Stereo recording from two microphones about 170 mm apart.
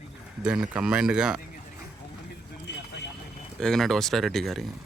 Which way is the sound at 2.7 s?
90° left.